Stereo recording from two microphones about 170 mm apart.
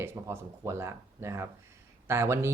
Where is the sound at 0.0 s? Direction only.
15° right (ahead or behind).